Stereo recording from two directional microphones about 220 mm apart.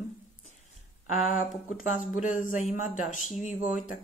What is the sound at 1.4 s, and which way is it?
Speech, 35° left (ahead or behind).